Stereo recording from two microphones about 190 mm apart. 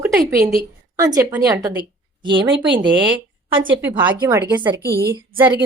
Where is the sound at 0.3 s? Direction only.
15° right (ahead or behind).